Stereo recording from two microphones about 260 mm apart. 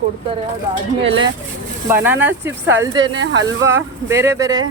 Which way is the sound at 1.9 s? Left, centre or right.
Centre.